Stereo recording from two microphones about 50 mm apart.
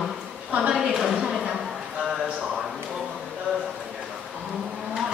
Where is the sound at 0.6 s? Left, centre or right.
Centre.